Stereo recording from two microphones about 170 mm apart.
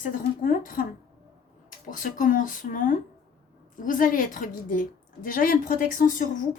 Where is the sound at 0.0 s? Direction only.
50° left (ahead or behind).